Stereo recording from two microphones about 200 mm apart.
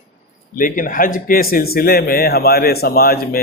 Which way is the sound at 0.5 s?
40° left (ahead or behind).